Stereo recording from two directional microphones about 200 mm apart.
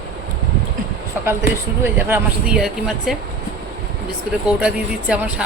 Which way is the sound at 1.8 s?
10° right (ahead or behind).